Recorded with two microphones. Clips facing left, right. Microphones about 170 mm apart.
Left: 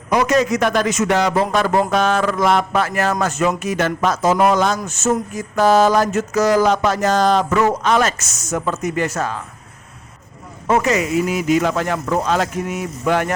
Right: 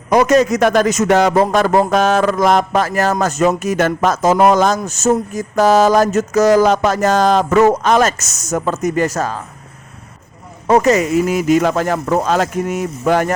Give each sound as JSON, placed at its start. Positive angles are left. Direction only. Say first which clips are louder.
{"t": 0.1, "sound": "a man's voice", "louder": "right 4 dB", "side_deg": -45}
{"t": 10.7, "sound": "a man's voice", "louder": "right 5 dB", "side_deg": -40}